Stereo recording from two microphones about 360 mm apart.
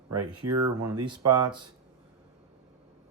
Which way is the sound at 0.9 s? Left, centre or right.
Centre.